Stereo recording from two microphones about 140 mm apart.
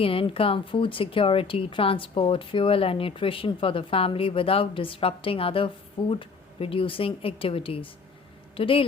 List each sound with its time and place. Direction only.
0.0 s speech: 40° left (ahead or behind)